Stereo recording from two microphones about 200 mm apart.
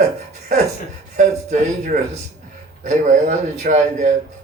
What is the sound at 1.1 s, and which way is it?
Speech, 40° right (ahead or behind).